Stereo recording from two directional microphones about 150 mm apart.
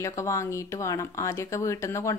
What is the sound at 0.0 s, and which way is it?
A woman's voice, 20° left (ahead or behind).